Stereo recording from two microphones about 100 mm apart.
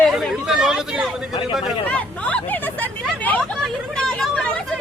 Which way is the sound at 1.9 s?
15° left (ahead or behind).